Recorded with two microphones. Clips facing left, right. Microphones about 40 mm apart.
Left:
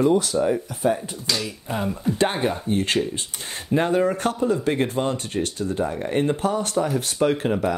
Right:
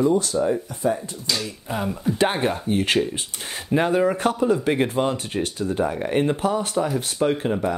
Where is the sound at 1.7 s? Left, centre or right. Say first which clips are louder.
Even; centre.